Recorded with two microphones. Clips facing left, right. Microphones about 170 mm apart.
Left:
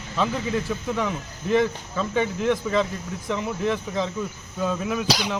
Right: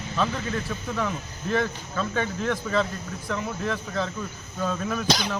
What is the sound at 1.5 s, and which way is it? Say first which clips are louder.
Speech: left 5 dB; 15° left (ahead or behind).